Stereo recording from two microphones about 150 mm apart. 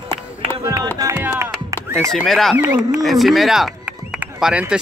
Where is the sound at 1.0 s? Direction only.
15° right (ahead or behind).